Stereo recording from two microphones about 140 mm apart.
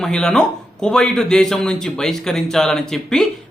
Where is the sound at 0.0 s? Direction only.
5° left (ahead or behind).